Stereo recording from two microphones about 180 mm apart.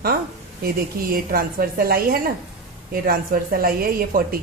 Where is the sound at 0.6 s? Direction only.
55° right (ahead or behind).